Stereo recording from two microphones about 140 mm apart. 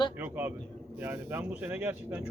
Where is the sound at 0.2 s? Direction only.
15° right (ahead or behind).